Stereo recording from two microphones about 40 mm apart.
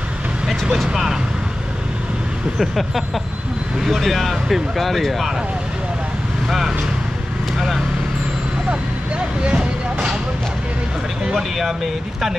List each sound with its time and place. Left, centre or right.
2.6 s speech: centre
7.5 s speech: centre
8.6 s vehicle: right
11.2 s speech: centre